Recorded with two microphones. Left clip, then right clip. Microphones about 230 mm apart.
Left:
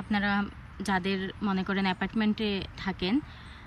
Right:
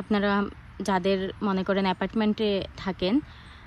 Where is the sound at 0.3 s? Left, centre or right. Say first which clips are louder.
Right 4 dB; centre.